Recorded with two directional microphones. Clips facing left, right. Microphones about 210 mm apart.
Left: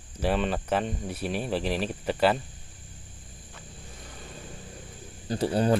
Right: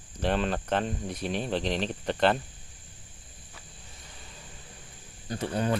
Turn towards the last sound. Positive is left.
turn(degrees=35)  # may be behind; listen again after turning